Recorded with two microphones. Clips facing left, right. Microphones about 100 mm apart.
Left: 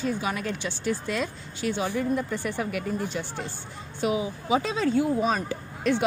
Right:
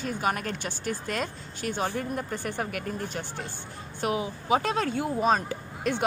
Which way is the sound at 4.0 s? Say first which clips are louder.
Left 2 dB; 50° right (ahead or behind).